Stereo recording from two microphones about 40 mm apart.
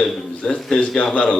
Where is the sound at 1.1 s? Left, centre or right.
Left.